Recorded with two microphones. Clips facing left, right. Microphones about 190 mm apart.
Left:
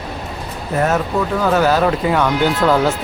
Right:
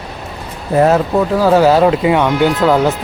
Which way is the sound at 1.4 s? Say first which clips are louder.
Right 5 dB; 30° right (ahead or behind).